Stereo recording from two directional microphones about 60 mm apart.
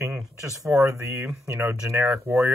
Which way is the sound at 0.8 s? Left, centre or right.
Right.